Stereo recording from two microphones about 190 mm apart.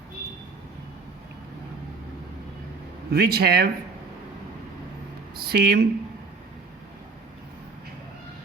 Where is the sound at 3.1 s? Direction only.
55° right (ahead or behind).